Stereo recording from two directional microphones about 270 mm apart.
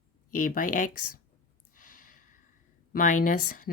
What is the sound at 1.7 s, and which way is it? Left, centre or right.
Gasp, left.